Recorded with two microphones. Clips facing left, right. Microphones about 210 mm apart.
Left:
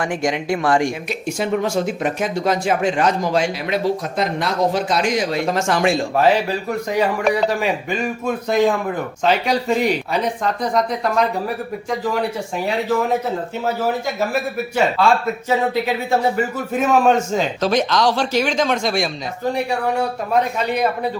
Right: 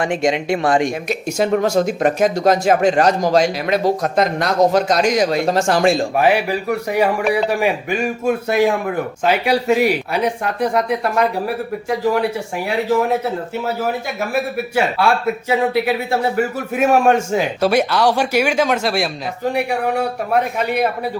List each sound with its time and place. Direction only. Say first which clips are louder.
0.0 s speech: right 3 dB; 25° right (ahead or behind)
1.4 s speech: right 4 dB; 40° right (ahead or behind)
6.1 s a man's voice: right 1 dB; 15° right (ahead or behind)
15.0 s a man's voice: even; 10° right (ahead or behind)
20.6 s a man's voice: right 2 dB; 10° right (ahead or behind)